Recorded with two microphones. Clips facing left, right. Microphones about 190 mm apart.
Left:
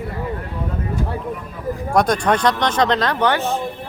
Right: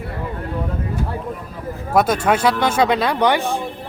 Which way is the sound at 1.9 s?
5° right (ahead or behind).